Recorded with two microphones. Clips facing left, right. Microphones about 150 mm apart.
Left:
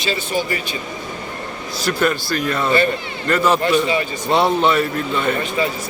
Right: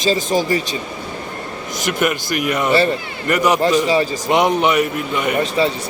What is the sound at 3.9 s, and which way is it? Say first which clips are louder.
Speech: right 4 dB; 35° right (ahead or behind).